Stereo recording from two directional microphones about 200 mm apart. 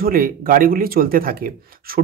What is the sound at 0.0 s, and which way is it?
Speech, 45° right (ahead or behind).